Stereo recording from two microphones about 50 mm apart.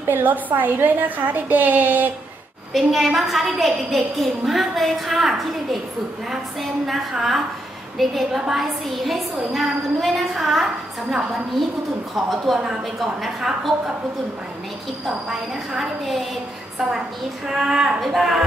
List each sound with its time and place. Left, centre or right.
0.0 s a woman's voice: right
2.7 s a woman's voice: centre
12.5 s a woman's voice: centre
15.0 s a woman's voice: centre
17.5 s a woman's voice: centre